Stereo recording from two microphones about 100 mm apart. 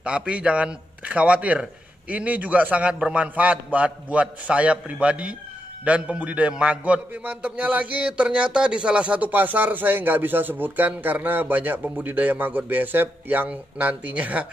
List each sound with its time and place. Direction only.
0.0 s a man's voice: 10° right (ahead or behind)